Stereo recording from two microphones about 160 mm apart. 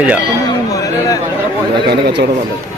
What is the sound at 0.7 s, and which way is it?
Chatter, 20° left (ahead or behind).